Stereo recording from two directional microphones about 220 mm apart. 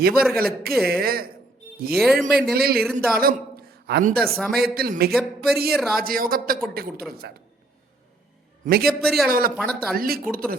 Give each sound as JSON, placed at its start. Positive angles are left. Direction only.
{"t": 0.0, "sound": "speech", "side_deg": -45}
{"t": 1.9, "sound": "a man's voice", "side_deg": 0}
{"t": 2.3, "sound": "speech", "side_deg": -45}
{"t": 2.8, "sound": "a man's voice", "side_deg": 5}
{"t": 3.2, "sound": "a man's voice", "side_deg": -45}
{"t": 4.4, "sound": "a man's voice", "side_deg": 0}
{"t": 4.6, "sound": "speech", "side_deg": -45}
{"t": 5.1, "sound": "a man's voice", "side_deg": 0}
{"t": 6.0, "sound": "speech", "side_deg": -40}
{"t": 8.6, "sound": "speech", "side_deg": -45}
{"t": 9.0, "sound": "a man's voice", "side_deg": 0}
{"t": 9.9, "sound": "speech", "side_deg": -40}